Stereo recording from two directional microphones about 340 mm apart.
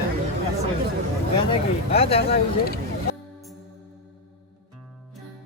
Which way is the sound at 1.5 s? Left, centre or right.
Centre.